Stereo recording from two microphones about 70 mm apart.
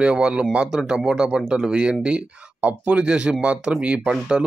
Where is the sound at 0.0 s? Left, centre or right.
Centre.